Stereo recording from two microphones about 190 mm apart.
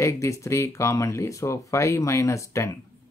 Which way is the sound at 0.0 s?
15° left (ahead or behind).